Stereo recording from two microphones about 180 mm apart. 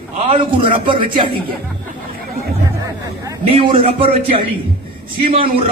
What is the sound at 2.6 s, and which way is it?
Hubbub, 20° right (ahead or behind).